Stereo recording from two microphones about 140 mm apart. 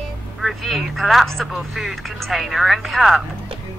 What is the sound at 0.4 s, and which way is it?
Speech, centre (ahead or behind).